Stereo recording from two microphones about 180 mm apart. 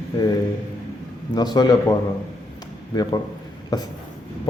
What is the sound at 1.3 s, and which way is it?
Speech, 20° left (ahead or behind).